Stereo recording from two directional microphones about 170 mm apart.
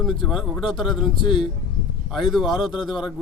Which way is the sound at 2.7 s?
30° left (ahead or behind).